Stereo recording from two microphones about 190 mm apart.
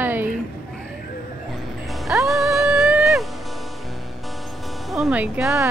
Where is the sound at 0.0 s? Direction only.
10° right (ahead or behind).